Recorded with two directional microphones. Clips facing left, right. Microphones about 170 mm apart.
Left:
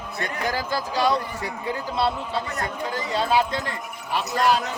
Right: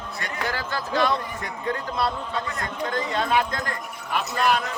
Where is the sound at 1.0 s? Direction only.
35° left (ahead or behind).